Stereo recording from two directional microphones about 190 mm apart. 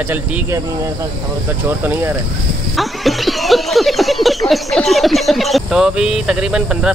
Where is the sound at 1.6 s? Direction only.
10° right (ahead or behind).